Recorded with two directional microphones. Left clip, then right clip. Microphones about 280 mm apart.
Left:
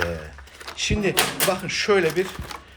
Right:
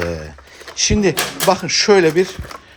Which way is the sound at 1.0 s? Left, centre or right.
Centre.